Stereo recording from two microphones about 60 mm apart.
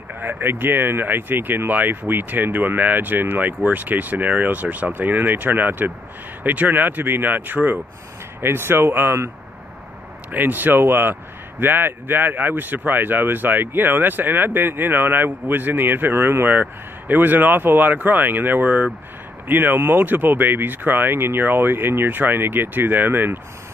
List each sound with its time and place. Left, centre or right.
0.1 s speech: right
8.4 s speech: right
10.3 s speech: right